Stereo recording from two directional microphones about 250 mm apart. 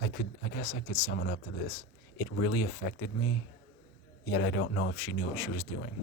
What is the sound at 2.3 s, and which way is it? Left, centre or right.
Speech, left.